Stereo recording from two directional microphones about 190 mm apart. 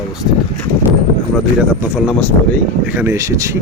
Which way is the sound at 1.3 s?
5° right (ahead or behind).